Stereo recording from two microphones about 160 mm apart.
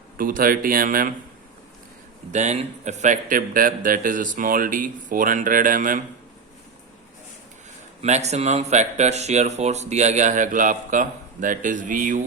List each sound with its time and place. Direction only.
0.2 s a man's voice: 60° right (ahead or behind)
2.3 s a man's voice: 45° right (ahead or behind)
8.0 s speech: 45° right (ahead or behind)